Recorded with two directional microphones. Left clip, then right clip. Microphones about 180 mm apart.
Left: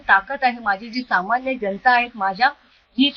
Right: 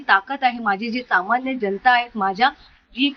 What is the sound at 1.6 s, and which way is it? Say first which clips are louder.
Speech: even; 30° right (ahead or behind).